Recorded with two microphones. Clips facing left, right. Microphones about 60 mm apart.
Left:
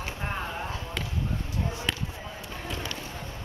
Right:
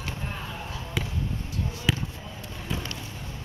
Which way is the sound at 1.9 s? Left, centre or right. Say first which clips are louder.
Right 7 dB; centre.